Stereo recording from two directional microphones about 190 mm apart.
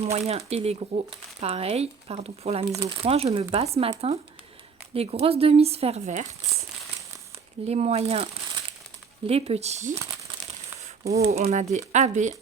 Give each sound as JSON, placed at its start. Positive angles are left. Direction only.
{"t": 0.0, "sound": "speech", "side_deg": -30}
{"t": 7.7, "sound": "speech", "side_deg": -35}
{"t": 11.3, "sound": "speech", "side_deg": -35}